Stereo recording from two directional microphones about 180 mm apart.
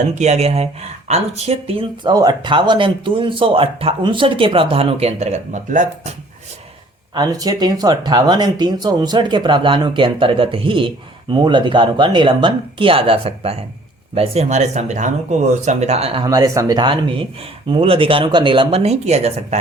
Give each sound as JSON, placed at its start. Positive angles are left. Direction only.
{"t": 0.0, "sound": "speech", "side_deg": -40}
{"t": 7.1, "sound": "speech", "side_deg": -20}
{"t": 16.3, "sound": "speech", "side_deg": -20}